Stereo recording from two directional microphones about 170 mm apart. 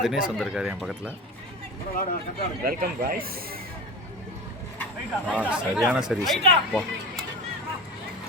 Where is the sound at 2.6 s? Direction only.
60° right (ahead or behind).